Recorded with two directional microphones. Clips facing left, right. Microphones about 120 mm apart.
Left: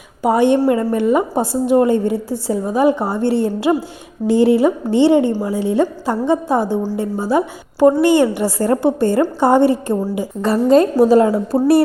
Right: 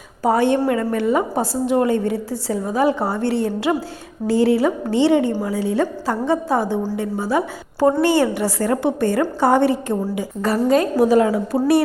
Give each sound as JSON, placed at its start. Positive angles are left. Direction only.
{"t": 0.2, "sound": "a woman's voice", "side_deg": 15}
{"t": 11.5, "sound": "speech", "side_deg": 40}